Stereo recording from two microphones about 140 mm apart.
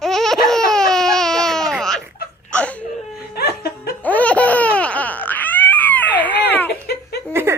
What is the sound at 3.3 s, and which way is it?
Laughter, 90° left.